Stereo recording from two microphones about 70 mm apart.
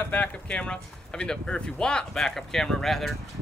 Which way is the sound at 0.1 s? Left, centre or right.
Left.